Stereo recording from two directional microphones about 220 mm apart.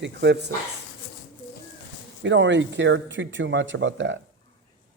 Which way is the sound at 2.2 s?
55° right (ahead or behind).